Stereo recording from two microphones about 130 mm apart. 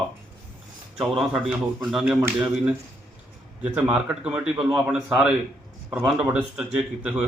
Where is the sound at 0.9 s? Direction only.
5° right (ahead or behind).